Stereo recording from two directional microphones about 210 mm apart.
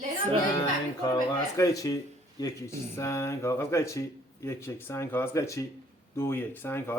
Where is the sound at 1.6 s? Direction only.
15° left (ahead or behind).